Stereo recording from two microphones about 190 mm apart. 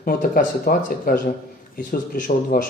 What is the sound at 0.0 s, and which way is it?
A man's voice, 50° left (ahead or behind).